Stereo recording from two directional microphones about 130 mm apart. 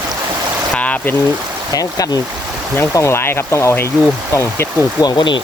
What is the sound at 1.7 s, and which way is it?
Speech, 25° left (ahead or behind).